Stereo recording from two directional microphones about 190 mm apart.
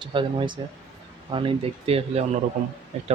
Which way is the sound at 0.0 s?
25° right (ahead or behind).